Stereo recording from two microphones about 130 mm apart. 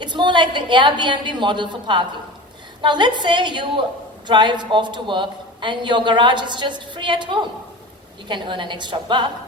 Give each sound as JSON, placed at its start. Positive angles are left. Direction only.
{"t": 0.0, "sound": "a woman's voice", "side_deg": -35}